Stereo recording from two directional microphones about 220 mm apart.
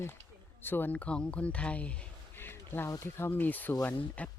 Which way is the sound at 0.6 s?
10° left (ahead or behind).